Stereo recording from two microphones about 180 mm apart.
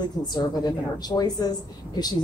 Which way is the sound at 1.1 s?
20° left (ahead or behind).